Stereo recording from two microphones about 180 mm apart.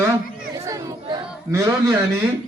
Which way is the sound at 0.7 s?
20° right (ahead or behind).